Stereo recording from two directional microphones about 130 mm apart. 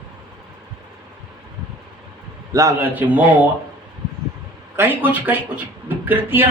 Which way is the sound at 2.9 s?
15° right (ahead or behind).